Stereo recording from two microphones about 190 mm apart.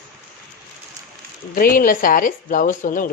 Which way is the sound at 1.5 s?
50° left (ahead or behind).